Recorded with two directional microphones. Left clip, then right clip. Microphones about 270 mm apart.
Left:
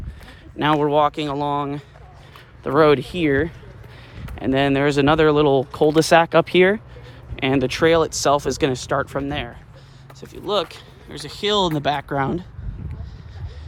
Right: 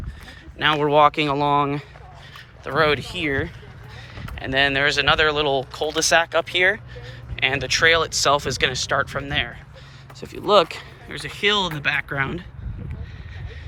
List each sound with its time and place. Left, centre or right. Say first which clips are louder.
0.6 s speech: right 1 dB; centre
2.6 s speech: left 4 dB; left; by 12.5 s centre